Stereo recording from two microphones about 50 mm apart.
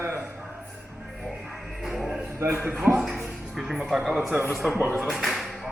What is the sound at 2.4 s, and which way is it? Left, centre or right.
Speech, right.